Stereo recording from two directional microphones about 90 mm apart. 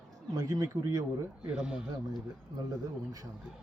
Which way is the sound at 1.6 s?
10° right (ahead or behind).